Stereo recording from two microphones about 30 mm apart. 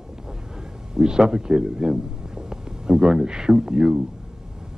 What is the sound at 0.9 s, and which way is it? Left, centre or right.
A man's voice, right.